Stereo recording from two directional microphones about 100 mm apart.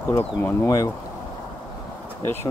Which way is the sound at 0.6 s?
35° left (ahead or behind).